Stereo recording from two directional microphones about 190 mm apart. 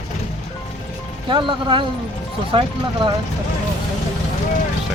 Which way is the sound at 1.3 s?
25° right (ahead or behind).